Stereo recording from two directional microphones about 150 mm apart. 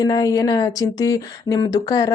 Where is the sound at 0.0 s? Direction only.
25° left (ahead or behind).